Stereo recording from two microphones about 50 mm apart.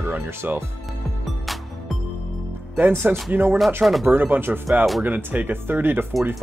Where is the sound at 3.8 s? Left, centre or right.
Centre.